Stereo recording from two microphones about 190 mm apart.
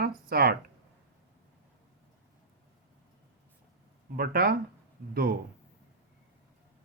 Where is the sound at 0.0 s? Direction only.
50° right (ahead or behind).